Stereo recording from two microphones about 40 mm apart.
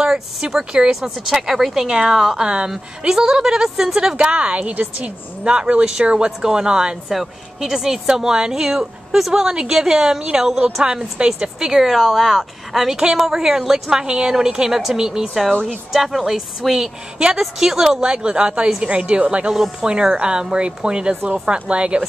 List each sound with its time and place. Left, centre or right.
0.0 s a woman's voice: centre
4.2 s a woman's voice: right
7.1 s a woman's voice: centre
11.8 s speech: centre
18.0 s a woman's voice: right